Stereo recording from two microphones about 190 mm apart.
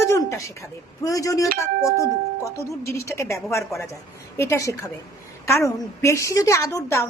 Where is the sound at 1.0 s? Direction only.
15° left (ahead or behind).